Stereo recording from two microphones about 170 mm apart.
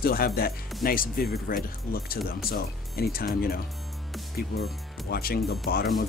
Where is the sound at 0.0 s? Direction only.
60° left (ahead or behind).